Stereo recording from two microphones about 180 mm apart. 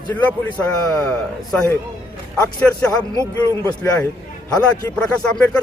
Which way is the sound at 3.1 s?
20° left (ahead or behind).